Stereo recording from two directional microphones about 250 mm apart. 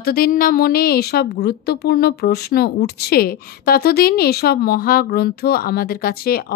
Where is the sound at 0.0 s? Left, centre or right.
Left.